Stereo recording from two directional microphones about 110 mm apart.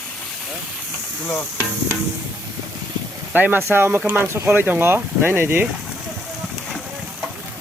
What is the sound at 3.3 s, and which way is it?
Speech, 15° right (ahead or behind).